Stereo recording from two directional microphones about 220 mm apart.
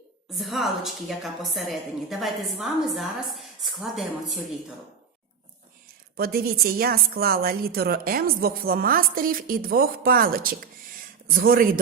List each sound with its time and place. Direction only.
0.3 s a woman's voice: centre (ahead or behind)
6.1 s a woman's voice: 45° right (ahead or behind)